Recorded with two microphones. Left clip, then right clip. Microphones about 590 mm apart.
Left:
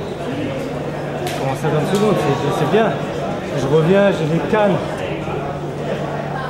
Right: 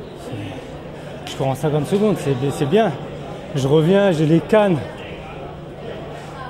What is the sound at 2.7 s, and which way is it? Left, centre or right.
Speech, right.